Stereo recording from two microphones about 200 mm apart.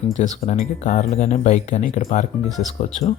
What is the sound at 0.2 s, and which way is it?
Speech, 35° left (ahead or behind).